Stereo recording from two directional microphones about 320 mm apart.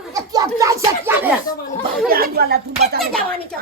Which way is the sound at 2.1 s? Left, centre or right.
Right.